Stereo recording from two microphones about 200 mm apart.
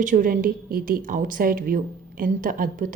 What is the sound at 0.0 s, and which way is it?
A woman's voice, 40° right (ahead or behind).